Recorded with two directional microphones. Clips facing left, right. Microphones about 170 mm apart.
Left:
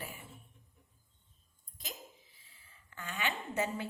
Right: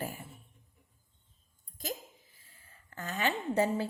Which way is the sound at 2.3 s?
45° right (ahead or behind).